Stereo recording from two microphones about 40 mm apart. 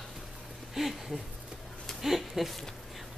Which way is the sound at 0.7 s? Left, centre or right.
Centre.